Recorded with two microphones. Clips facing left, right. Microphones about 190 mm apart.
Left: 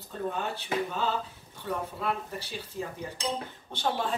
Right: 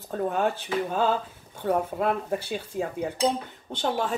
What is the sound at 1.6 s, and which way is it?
Speech, 50° right (ahead or behind).